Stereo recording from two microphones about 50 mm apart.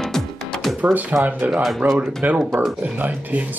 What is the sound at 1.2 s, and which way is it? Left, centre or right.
Speech, right.